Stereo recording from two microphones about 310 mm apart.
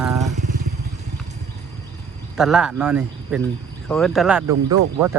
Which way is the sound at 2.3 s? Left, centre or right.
Centre.